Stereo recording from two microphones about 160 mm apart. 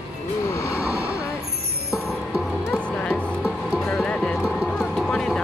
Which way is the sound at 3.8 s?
10° left (ahead or behind).